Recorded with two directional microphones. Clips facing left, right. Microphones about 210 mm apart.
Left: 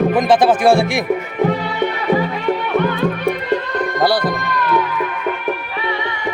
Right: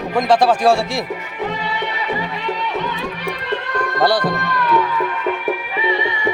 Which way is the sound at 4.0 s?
Centre (ahead or behind).